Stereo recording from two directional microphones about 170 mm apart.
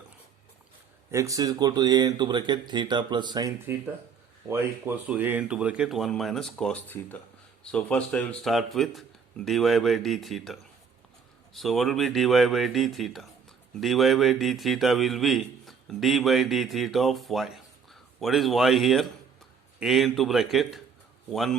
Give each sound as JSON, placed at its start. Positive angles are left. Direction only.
{"t": 1.1, "sound": "a man's voice", "side_deg": -20}